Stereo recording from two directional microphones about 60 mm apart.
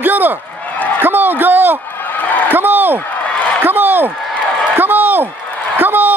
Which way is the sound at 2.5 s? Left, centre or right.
Right.